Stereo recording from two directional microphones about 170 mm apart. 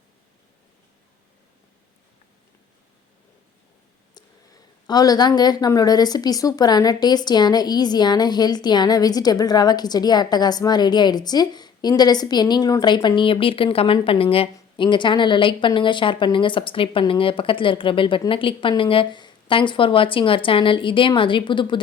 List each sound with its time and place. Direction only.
4.1 s speech: 25° left (ahead or behind)